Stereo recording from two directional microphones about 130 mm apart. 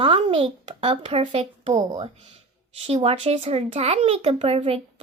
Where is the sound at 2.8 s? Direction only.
50° right (ahead or behind).